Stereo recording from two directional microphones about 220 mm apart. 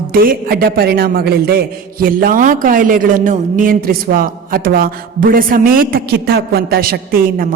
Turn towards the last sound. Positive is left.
turn(degrees=-40)  # may be behind; listen again after turning